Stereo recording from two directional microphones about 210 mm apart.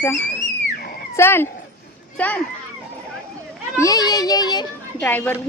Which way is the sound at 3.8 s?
15° left (ahead or behind).